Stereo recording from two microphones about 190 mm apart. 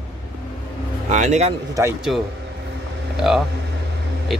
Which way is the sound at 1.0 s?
40° right (ahead or behind).